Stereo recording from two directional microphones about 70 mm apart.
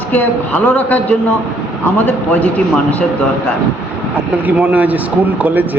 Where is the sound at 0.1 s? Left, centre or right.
Left.